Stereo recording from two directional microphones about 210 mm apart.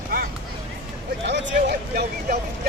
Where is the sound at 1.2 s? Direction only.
55° right (ahead or behind).